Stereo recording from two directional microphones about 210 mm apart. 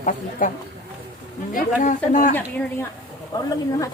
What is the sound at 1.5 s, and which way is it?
Speech, 40° left (ahead or behind).